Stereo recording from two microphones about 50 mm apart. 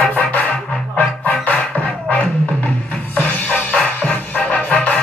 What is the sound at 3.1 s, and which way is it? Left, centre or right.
Music, left.